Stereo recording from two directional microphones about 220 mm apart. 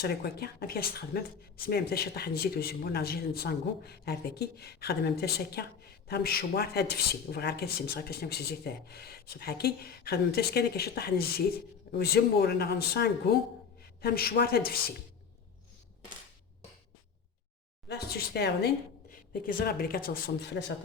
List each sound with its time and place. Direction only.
0.0 s speech: 45° left (ahead or behind)
17.8 s speech: 45° left (ahead or behind)